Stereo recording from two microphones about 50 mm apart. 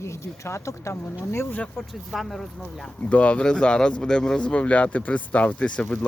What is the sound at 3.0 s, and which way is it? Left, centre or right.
Speech, left.